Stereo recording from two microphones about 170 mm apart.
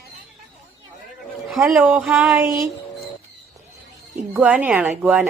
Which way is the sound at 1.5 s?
5° right (ahead or behind).